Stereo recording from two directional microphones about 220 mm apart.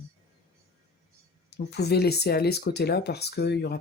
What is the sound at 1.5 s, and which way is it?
Speech, 50° left (ahead or behind).